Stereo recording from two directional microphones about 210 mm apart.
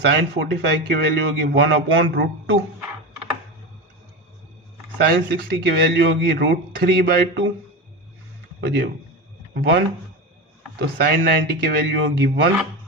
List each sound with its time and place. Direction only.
0.0 s a man's voice: 55° right (ahead or behind)
5.0 s a man's voice: 50° right (ahead or behind)
8.6 s a man's voice: 55° right (ahead or behind)